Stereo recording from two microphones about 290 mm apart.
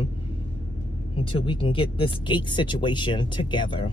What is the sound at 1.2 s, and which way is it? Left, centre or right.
Speech, centre.